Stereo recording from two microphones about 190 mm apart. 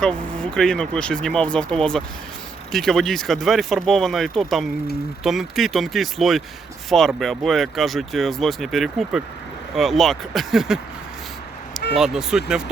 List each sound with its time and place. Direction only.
0.0 s speech: 5° left (ahead or behind)
11.9 s speech: centre (ahead or behind)